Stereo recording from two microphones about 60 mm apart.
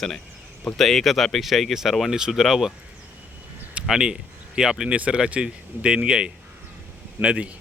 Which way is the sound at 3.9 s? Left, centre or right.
Centre.